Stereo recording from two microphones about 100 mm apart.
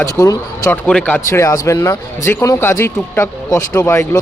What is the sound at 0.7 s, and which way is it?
Speech, 10° left (ahead or behind).